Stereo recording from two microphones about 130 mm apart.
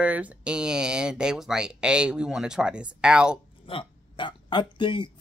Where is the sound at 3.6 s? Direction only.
40° left (ahead or behind).